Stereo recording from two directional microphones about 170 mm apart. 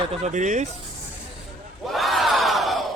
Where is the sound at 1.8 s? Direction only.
Centre (ahead or behind).